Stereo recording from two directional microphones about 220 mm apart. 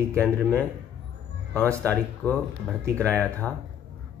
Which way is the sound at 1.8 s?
5° left (ahead or behind).